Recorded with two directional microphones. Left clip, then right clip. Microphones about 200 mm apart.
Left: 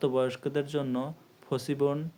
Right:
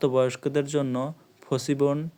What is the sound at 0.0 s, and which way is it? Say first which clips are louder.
Speech: right 5 dB; 40° right (ahead or behind).